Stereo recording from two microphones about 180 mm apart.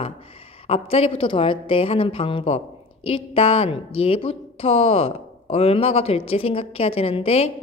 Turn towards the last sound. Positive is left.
turn(degrees=35)  # may be behind; listen again after turning